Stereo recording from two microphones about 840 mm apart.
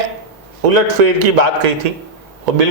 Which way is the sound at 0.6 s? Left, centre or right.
Right.